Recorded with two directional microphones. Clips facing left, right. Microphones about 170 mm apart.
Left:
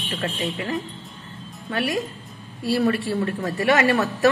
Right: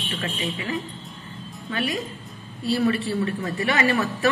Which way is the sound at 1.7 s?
60° left (ahead or behind).